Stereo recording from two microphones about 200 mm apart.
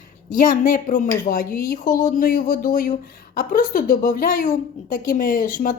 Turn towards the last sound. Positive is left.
turn(degrees=45)  # may be behind; listen again after turning